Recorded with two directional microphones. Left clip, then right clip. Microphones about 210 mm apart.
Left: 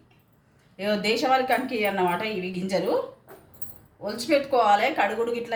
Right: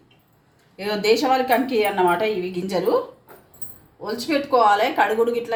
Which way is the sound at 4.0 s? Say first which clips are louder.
Even; 15° right (ahead or behind).